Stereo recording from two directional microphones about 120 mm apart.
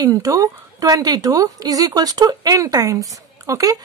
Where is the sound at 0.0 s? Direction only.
30° right (ahead or behind).